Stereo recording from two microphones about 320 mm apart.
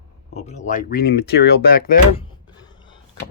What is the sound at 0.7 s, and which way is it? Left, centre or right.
Speech, left.